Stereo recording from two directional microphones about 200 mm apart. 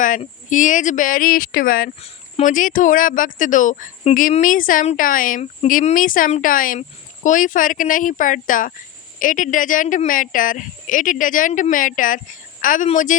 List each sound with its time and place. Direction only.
0.0 s speech: 40° left (ahead or behind)